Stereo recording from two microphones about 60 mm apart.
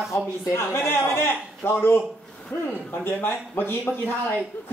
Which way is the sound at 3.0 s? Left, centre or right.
Left.